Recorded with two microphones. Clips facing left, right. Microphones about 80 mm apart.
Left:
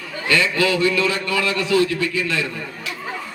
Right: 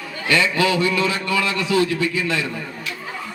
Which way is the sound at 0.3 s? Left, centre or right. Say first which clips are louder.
Even; right.